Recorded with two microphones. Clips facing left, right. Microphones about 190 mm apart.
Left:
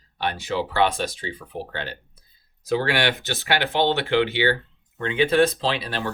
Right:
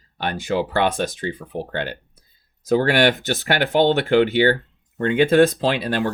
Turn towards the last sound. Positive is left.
turn(degrees=-50)  # may be behind; listen again after turning